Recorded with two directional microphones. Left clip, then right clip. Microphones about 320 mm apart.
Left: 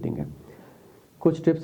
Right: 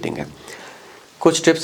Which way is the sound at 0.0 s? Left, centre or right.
Centre.